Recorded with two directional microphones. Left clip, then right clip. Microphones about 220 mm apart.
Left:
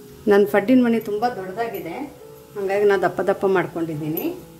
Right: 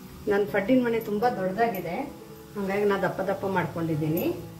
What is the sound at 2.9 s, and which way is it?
Speech, 50° left (ahead or behind).